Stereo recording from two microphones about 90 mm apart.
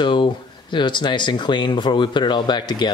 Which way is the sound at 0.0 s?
60° left (ahead or behind).